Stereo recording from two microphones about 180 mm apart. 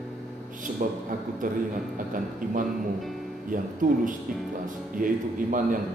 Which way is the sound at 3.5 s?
45° right (ahead or behind).